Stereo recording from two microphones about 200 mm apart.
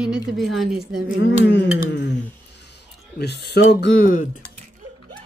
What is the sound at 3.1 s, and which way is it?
Speech, 55° left (ahead or behind).